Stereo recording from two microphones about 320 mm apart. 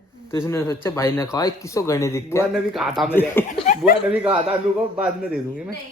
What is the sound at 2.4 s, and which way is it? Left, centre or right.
A man's voice, centre.